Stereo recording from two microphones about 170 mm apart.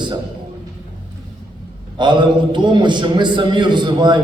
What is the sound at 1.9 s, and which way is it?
A man's voice, 25° right (ahead or behind).